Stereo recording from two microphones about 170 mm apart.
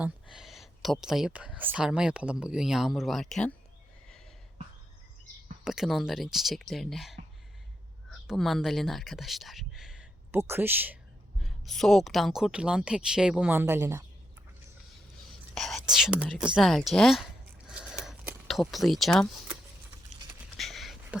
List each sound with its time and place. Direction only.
0.0 s speech: 5° right (ahead or behind)
5.6 s speech: centre (ahead or behind)
8.3 s speech: centre (ahead or behind)
10.3 s speech: 15° right (ahead or behind)
11.4 s speech: centre (ahead or behind)
15.5 s speech: centre (ahead or behind)
17.7 s a sound: 5° right (ahead or behind)
20.6 s a sound: centre (ahead or behind)